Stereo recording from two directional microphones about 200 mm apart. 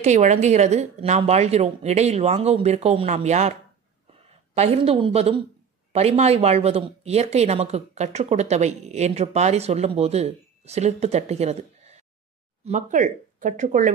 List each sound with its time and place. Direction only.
0.0 s speech: 35° right (ahead or behind)
4.6 s speech: 25° right (ahead or behind)